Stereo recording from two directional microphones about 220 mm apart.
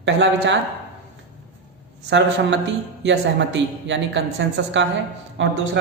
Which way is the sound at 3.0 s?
55° right (ahead or behind).